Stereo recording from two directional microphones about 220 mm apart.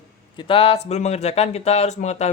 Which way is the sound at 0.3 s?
25° left (ahead or behind).